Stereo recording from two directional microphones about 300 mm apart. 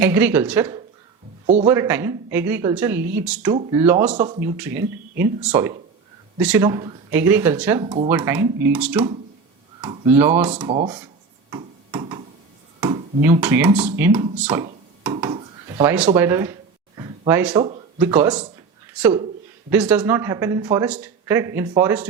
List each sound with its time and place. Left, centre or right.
0.0 s speech: centre
9.8 s speech: centre
10.7 s speech: centre
11.5 s finger snapping: centre
12.8 s speech: centre